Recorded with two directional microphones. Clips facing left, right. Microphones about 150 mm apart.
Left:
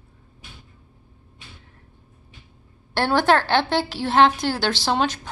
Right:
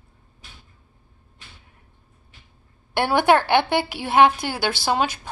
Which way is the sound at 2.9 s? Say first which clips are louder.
Right 1 dB; 15° right (ahead or behind).